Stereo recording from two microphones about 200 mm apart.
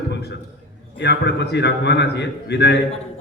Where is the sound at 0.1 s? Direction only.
55° left (ahead or behind).